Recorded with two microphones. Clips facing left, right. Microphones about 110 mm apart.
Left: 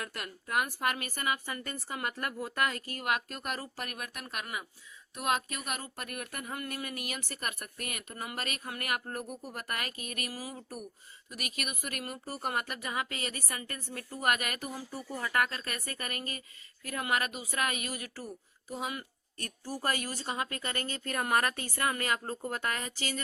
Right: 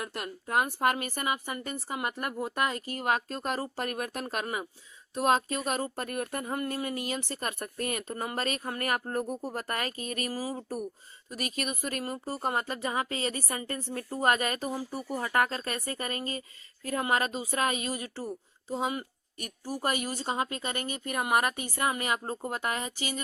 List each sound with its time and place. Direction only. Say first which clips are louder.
0.0 s speech: right 4 dB; 25° right (ahead or behind)
19.4 s speech: right 3 dB; 15° right (ahead or behind)